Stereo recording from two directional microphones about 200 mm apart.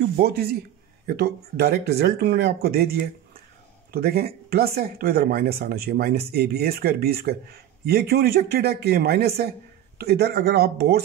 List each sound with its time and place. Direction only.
0.2 s speech: 50° right (ahead or behind)